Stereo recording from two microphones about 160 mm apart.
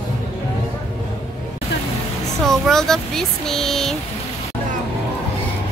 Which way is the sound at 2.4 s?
Centre (ahead or behind).